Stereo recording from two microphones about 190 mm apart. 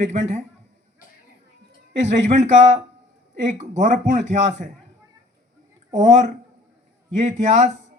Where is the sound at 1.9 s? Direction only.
40° right (ahead or behind).